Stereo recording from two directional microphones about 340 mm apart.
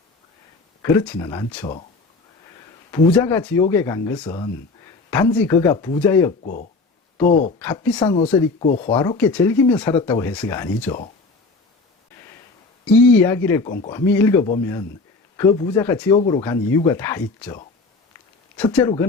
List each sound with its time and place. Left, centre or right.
0.8 s speech: centre
2.9 s speech: centre
6.4 s speech: left
7.6 s speech: centre
8.5 s speech: centre
9.0 s speech: centre
12.8 s speech: centre